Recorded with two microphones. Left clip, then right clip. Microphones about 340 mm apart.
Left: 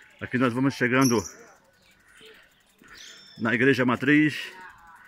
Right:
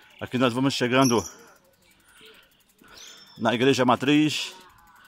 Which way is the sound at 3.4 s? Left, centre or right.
Centre.